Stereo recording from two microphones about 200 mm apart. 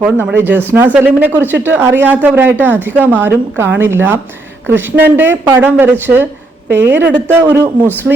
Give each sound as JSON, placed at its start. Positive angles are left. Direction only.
{"t": 0.0, "sound": "speech", "side_deg": -10}